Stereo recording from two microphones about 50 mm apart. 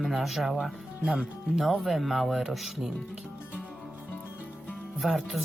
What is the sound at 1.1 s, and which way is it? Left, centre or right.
Speech, centre.